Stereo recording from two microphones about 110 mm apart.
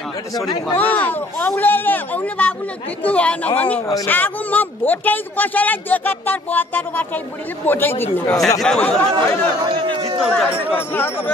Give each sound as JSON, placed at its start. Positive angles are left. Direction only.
{"t": 0.7, "sound": "speech", "side_deg": 15}
{"t": 8.5, "sound": "speech", "side_deg": 5}
{"t": 9.6, "sound": "a man's voice", "side_deg": -40}
{"t": 10.2, "sound": "speech", "side_deg": 5}